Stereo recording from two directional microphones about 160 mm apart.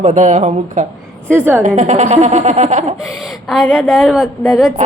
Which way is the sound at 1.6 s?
45° right (ahead or behind).